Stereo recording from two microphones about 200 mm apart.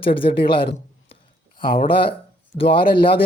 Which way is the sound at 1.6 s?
45° left (ahead or behind).